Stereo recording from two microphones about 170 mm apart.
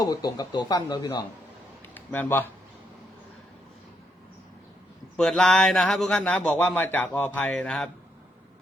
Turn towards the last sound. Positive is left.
turn(degrees=5)  # may be behind; listen again after turning